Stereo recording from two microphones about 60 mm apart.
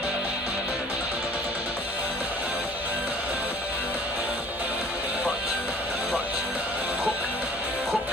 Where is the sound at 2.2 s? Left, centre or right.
Right.